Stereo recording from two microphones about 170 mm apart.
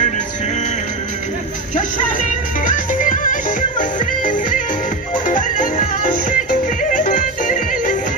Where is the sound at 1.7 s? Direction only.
50° left (ahead or behind).